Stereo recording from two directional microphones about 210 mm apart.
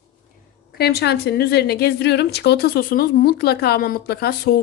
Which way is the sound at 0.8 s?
50° left (ahead or behind).